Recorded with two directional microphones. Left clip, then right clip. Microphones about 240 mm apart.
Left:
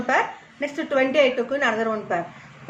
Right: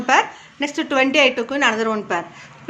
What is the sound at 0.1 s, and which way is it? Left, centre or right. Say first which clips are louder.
A woman's voice: right 6 dB; right.